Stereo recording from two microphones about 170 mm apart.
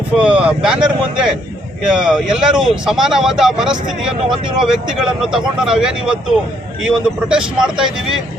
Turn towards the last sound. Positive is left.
turn(degrees=-5)  # may be behind; listen again after turning